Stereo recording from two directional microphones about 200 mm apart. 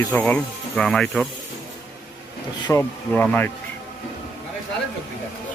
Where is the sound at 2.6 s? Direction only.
10° left (ahead or behind).